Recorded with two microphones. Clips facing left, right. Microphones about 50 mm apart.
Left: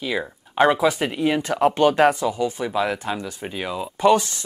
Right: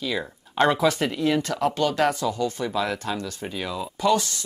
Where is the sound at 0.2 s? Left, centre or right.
Centre.